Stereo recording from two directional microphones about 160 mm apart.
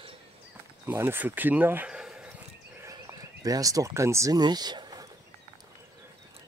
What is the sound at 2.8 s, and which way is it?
Speech, 20° right (ahead or behind).